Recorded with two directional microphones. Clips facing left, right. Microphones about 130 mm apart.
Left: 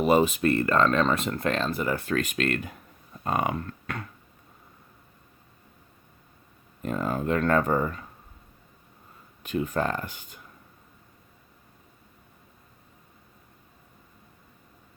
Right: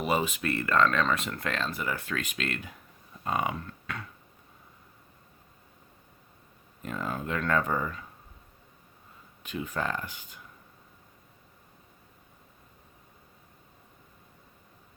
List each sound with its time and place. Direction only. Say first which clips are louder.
0.0 s speech: left 7 dB; 40° left (ahead or behind)
6.8 s speech: left 6 dB; 40° left (ahead or behind)
9.4 s speech: left 6 dB; 45° left (ahead or behind)